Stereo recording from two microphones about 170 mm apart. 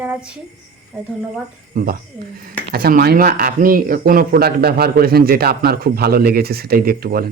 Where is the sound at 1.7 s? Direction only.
55° right (ahead or behind).